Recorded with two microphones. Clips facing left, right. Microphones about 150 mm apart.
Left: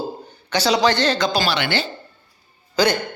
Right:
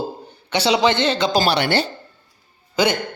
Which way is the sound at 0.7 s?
20° right (ahead or behind).